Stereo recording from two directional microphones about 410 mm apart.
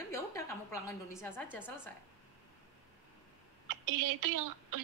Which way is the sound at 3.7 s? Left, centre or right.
Right.